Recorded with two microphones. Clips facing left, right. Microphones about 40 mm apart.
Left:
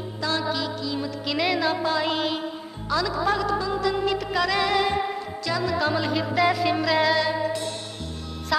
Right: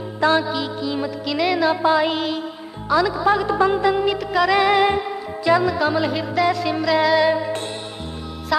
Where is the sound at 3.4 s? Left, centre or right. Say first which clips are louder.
Right 7 dB; right.